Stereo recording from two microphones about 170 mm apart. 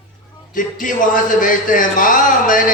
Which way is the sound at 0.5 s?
50° left (ahead or behind).